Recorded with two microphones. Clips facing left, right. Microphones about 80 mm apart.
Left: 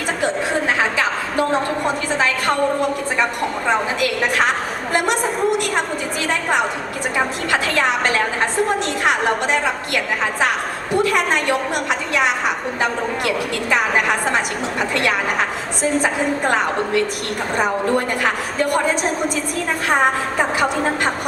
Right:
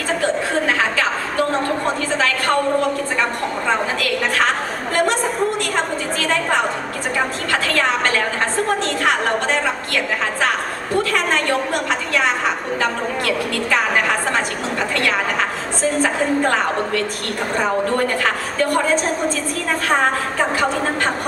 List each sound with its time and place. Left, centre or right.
4.0 s a woman's voice: centre